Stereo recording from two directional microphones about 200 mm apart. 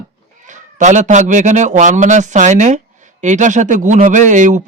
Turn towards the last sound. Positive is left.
turn(degrees=-40)  # may be behind; listen again after turning